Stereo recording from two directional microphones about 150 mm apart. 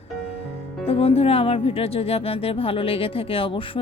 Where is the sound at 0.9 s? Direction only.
40° left (ahead or behind).